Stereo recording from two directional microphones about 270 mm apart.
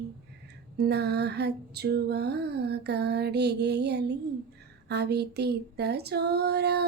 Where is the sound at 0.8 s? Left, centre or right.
Right.